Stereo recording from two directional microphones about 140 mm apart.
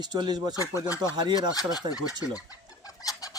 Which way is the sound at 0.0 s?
30° right (ahead or behind).